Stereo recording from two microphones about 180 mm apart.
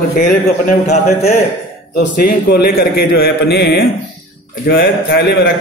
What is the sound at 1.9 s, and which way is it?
A man's voice, 60° left (ahead or behind).